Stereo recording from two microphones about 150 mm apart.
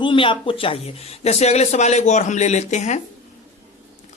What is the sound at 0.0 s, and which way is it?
A man's voice, 35° left (ahead or behind).